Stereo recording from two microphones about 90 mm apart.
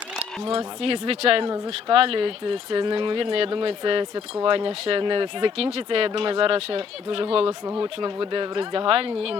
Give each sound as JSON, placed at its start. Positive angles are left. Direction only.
{"t": 0.4, "sound": "speech", "side_deg": -90}
{"t": 7.8, "sound": "speech", "side_deg": -75}